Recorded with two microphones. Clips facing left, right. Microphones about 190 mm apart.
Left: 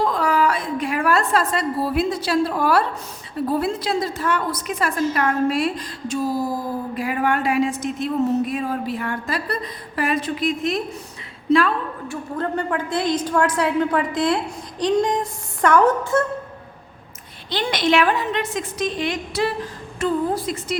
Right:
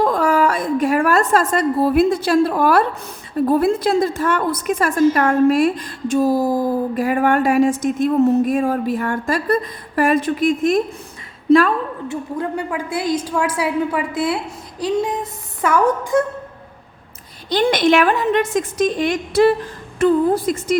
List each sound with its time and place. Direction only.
0.0 s a woman's voice: 50° right (ahead or behind)
12.0 s a woman's voice: 20° right (ahead or behind)
12.5 s a woman's voice: 10° right (ahead or behind)
17.5 s a woman's voice: 50° right (ahead or behind)